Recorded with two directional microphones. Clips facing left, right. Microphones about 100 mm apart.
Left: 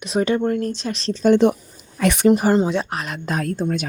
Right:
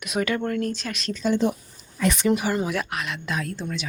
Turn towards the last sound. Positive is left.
turn(degrees=45)  # may be behind; listen again after turning